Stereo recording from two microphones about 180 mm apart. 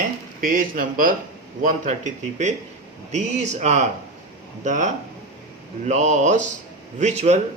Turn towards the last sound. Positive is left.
turn(degrees=-40)  # may be behind; listen again after turning